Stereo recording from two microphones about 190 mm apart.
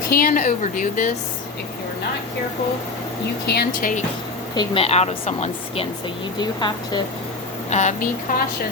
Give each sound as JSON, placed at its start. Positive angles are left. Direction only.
{"t": 0.1, "sound": "a woman's voice", "side_deg": 45}
{"t": 3.4, "sound": "a woman's voice", "side_deg": 55}
{"t": 4.5, "sound": "a woman's voice", "side_deg": 30}
{"t": 6.4, "sound": "a woman's voice", "side_deg": 20}
{"t": 7.7, "sound": "a woman's voice", "side_deg": 40}